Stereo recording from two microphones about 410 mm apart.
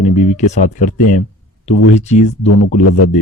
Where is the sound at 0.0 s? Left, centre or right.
Centre.